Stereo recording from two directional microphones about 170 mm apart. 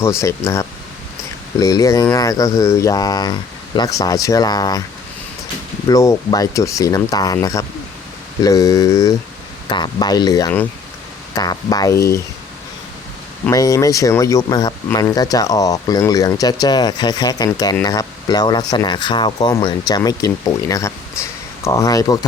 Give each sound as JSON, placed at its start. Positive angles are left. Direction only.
{"t": 0.0, "sound": "speech", "side_deg": 15}
{"t": 5.9, "sound": "speech", "side_deg": 20}
{"t": 13.5, "sound": "speech", "side_deg": 20}